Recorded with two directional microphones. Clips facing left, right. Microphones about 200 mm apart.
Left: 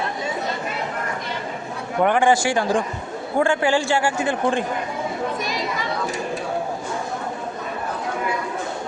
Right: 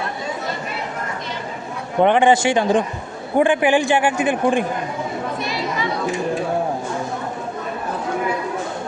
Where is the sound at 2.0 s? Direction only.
20° right (ahead or behind).